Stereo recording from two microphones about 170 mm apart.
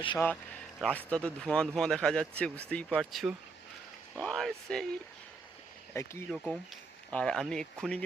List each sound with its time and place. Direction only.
0.8 s speech: 5° left (ahead or behind)
5.9 s speech: 15° left (ahead or behind)
6.3 s speech: 5° left (ahead or behind)